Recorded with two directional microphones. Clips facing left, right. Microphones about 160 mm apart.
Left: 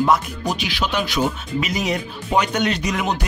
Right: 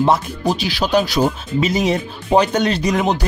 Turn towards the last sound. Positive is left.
turn(degrees=-35)  # may be behind; listen again after turning